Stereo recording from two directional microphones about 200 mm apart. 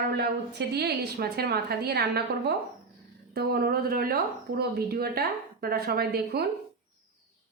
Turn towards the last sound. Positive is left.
turn(degrees=-50)  # may be behind; listen again after turning